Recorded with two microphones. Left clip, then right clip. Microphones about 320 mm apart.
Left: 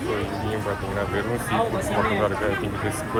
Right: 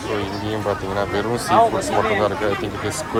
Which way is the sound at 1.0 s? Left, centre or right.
Centre.